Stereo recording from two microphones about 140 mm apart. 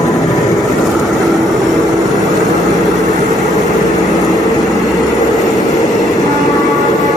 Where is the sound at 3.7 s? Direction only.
25° left (ahead or behind).